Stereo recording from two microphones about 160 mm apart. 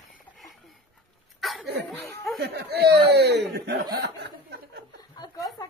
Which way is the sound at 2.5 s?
90° right.